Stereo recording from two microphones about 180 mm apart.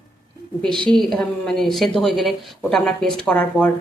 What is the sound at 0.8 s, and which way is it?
Speech, 25° right (ahead or behind).